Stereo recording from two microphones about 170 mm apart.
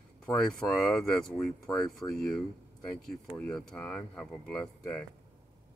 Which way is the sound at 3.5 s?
5° left (ahead or behind).